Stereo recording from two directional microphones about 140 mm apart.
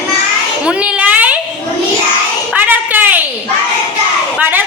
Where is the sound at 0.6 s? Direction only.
10° right (ahead or behind).